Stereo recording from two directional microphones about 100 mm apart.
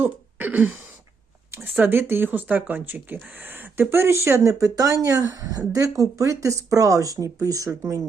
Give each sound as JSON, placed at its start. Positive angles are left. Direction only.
{"t": 0.0, "sound": "throat clearing", "side_deg": -20}
{"t": 1.5, "sound": "speech", "side_deg": -20}